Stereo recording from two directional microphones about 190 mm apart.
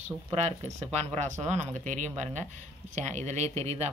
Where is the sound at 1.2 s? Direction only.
40° right (ahead or behind).